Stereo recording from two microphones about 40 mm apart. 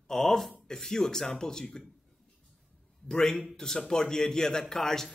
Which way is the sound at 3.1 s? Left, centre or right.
Centre.